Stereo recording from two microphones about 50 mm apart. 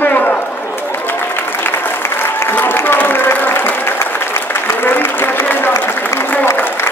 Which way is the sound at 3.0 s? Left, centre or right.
Left.